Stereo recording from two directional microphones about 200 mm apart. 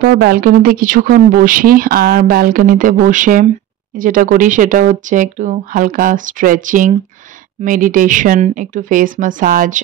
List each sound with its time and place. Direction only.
0.0 s speech: 50° right (ahead or behind)